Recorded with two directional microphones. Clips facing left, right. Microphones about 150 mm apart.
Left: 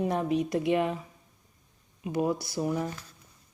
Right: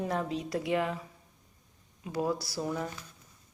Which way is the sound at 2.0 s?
20° left (ahead or behind).